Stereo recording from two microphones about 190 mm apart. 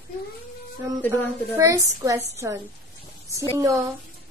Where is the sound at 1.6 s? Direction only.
15° right (ahead or behind).